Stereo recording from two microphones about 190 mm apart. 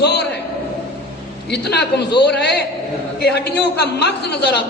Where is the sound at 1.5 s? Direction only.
60° left (ahead or behind).